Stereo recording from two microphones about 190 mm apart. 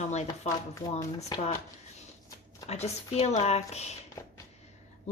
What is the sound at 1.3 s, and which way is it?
Speech, 25° left (ahead or behind).